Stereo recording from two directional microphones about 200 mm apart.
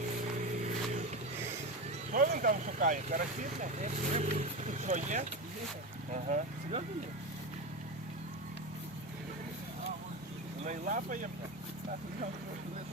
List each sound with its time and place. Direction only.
0.5 s vehicle: 35° right (ahead or behind)
2.1 s speech: 40° right (ahead or behind)
10.6 s speech: 40° right (ahead or behind)